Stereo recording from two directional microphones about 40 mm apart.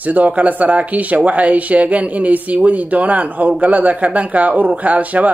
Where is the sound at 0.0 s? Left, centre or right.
Right.